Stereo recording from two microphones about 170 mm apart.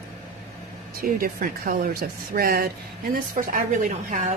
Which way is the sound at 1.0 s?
55° right (ahead or behind).